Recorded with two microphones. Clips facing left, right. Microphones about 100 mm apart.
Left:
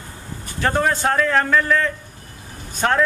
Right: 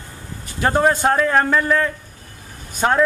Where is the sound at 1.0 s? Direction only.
25° right (ahead or behind).